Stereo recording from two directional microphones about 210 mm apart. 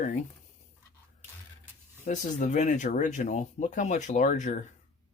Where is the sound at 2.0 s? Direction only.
35° left (ahead or behind).